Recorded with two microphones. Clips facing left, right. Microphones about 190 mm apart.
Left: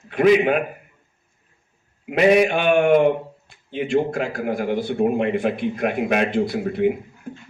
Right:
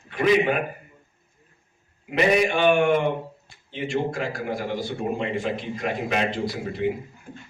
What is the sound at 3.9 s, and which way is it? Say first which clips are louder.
A man's voice: left 5 dB; 55° left (ahead or behind).